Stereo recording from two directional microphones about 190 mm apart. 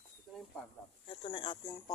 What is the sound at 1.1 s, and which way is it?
Speech, 30° left (ahead or behind).